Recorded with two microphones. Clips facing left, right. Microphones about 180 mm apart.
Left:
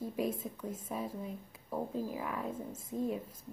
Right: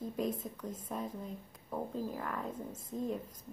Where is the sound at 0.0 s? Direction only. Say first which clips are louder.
Left 1 dB; 5° left (ahead or behind).